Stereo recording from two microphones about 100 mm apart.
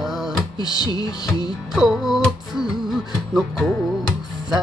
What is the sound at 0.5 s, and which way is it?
Music, 45° left (ahead or behind).